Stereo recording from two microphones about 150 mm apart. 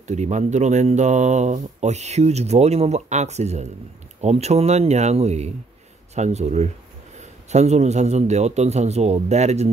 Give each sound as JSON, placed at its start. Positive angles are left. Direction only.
{"t": 0.0, "sound": "speech", "side_deg": -50}